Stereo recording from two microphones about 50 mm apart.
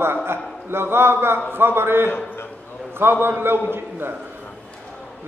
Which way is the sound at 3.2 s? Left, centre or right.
Right.